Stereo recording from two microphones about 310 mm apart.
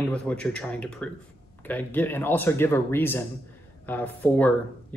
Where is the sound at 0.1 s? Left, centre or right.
Centre.